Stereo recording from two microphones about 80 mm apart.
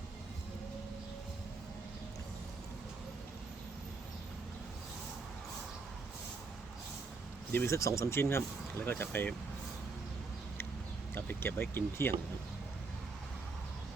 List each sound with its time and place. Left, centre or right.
7.5 s speech: left
11.1 s speech: left